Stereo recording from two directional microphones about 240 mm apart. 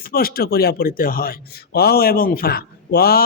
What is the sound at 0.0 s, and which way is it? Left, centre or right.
A man's voice, left.